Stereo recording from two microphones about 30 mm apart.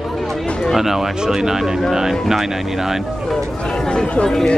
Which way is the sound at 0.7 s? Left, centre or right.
Centre.